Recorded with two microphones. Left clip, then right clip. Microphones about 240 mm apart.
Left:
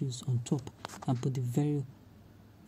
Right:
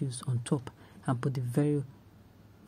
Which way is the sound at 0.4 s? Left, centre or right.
Centre.